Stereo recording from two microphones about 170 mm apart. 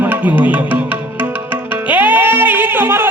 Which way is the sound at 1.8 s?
10° right (ahead or behind).